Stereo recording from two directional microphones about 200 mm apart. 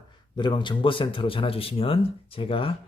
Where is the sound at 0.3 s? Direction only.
25° left (ahead or behind).